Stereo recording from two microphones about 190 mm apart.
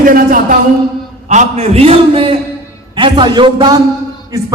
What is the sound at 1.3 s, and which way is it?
A man's voice, 35° right (ahead or behind).